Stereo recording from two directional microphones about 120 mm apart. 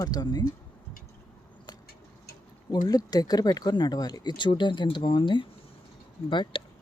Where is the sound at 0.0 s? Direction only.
35° left (ahead or behind).